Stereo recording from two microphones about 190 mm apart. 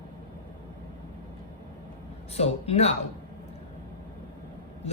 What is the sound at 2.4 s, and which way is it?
Speech, 35° left (ahead or behind).